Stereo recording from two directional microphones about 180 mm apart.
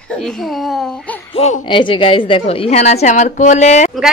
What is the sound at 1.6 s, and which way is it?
A woman's voice, 25° left (ahead or behind).